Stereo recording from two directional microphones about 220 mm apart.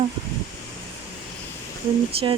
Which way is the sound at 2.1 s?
25° right (ahead or behind).